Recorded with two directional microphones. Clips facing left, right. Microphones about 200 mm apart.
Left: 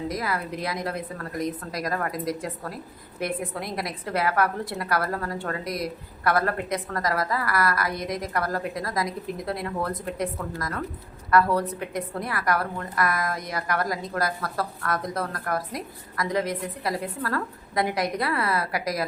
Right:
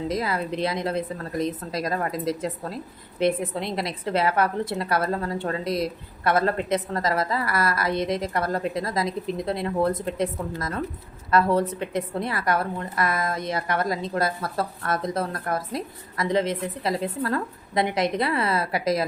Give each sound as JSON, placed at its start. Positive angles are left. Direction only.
{"t": 0.1, "sound": "a woman's voice", "side_deg": -25}